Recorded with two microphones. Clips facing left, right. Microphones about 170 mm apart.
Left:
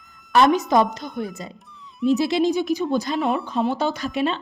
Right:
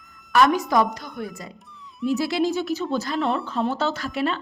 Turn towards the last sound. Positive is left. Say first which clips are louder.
# left 2 dB
turn(degrees=20)  # may be behind; listen again after turning